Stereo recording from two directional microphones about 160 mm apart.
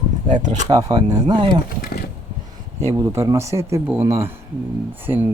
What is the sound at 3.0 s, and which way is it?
Speech, 15° right (ahead or behind).